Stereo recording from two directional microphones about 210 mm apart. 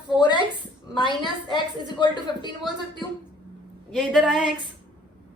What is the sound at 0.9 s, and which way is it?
Speech, 20° left (ahead or behind).